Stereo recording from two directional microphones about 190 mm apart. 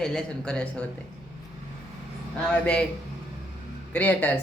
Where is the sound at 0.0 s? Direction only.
5° left (ahead or behind).